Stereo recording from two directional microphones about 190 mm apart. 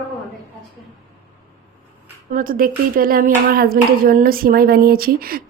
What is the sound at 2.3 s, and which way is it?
Speech, 50° right (ahead or behind).